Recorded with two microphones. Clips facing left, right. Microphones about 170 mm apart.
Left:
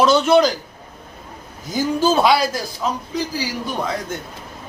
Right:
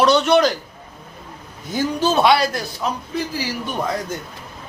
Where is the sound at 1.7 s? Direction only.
5° left (ahead or behind).